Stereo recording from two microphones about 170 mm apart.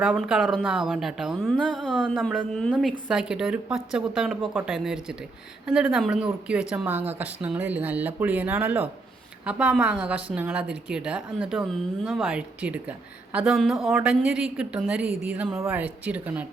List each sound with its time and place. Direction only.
0.0 s a woman's voice: centre (ahead or behind)